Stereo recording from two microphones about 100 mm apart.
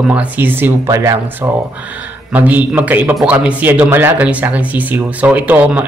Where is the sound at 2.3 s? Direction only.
15° right (ahead or behind).